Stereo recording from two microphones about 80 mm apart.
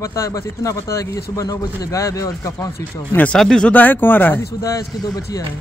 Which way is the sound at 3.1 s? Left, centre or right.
Centre.